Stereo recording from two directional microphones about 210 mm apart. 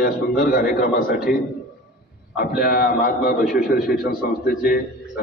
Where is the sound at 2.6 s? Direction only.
45° left (ahead or behind).